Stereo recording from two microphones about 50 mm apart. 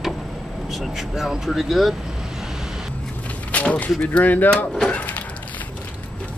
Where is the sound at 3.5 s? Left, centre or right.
Left.